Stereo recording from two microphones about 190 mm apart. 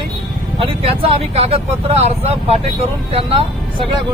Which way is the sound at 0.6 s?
30° right (ahead or behind).